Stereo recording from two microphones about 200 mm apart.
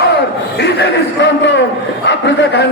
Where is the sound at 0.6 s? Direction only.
55° left (ahead or behind).